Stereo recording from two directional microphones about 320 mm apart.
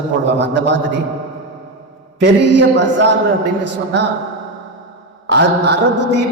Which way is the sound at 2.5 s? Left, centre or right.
Right.